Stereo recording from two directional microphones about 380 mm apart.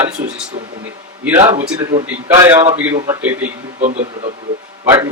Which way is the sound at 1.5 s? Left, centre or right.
Centre.